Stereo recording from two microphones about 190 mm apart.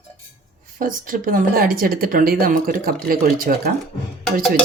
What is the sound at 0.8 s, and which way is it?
Speech, 45° right (ahead or behind).